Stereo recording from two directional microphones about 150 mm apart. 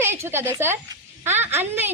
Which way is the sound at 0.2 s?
15° right (ahead or behind).